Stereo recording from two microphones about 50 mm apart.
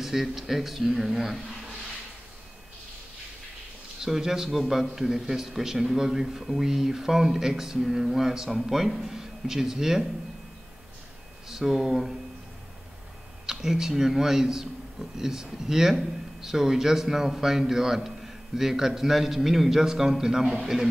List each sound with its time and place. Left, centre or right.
0.0 s speech: centre
4.0 s a man's voice: centre
11.4 s a man's voice: centre
13.5 s a man's voice: centre